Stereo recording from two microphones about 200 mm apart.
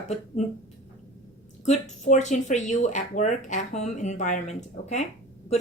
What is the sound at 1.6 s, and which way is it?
Speech, 35° left (ahead or behind).